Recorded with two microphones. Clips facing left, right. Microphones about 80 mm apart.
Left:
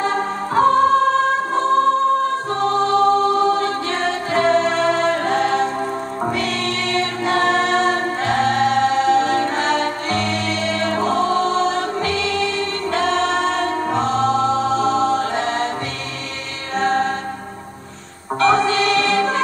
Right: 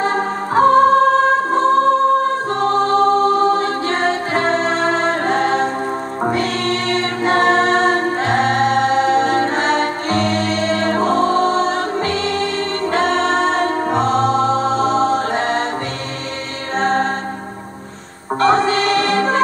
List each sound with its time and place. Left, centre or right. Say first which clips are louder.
0.7 s music: right 4 dB; right
2.5 s choir: right 1 dB; right
16.7 s music: right 1 dB; right
18.4 s music: right 1 dB; right